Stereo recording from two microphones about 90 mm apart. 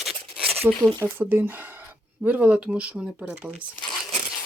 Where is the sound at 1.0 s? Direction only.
25° right (ahead or behind).